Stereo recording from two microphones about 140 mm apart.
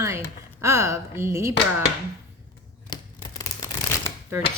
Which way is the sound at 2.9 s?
30° left (ahead or behind).